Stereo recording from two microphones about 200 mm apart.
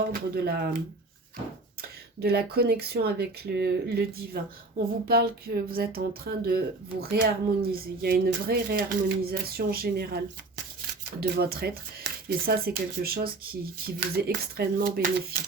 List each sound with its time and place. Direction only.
0.1 s speech: 50° right (ahead or behind)
1.8 s speech: 50° right (ahead or behind)